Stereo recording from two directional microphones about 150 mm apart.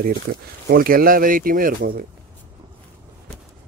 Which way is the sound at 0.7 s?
75° right (ahead or behind).